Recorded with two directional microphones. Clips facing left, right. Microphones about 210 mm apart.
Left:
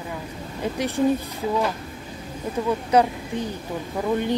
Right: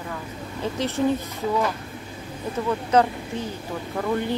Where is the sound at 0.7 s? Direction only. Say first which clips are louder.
Left 1 dB; 15° left (ahead or behind).